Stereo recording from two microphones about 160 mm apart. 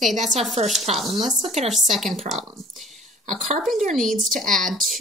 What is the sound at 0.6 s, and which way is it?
Speech, 40° right (ahead or behind).